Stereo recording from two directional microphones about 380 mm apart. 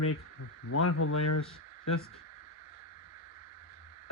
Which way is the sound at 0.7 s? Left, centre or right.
Left.